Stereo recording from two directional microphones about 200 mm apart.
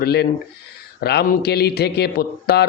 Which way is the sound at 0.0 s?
55° left (ahead or behind).